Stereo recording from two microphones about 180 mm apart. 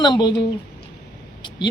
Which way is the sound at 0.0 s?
25° left (ahead or behind).